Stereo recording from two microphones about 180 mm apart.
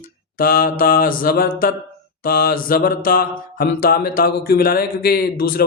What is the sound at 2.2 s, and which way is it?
Mantra, 55° left (ahead or behind).